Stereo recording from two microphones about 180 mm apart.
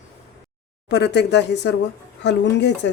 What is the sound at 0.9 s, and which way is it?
Speech, 70° left (ahead or behind).